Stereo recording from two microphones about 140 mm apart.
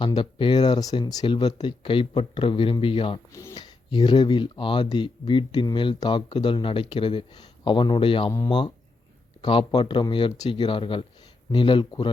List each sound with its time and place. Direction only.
0.0 s speech: 35° left (ahead or behind)
3.3 s speech: 25° left (ahead or behind)
8.3 s speech: 25° left (ahead or behind)
9.4 s speech: 35° left (ahead or behind)